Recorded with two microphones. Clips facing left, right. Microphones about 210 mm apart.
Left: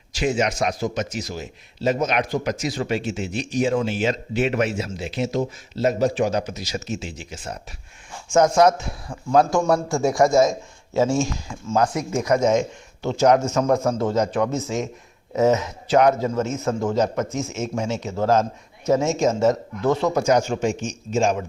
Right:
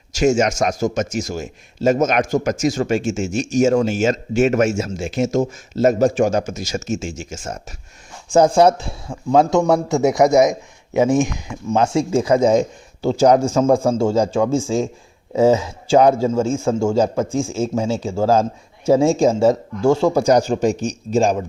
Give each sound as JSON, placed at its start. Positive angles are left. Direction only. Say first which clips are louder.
{"t": 0.1, "sound": "a man's voice", "louder": "right 6 dB", "side_deg": -45}
{"t": 8.3, "sound": "a man's voice", "louder": "right 3 dB", "side_deg": -30}